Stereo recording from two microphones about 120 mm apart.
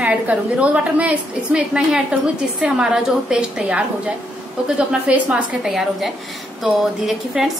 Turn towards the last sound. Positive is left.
turn(degrees=-5)  # may be behind; listen again after turning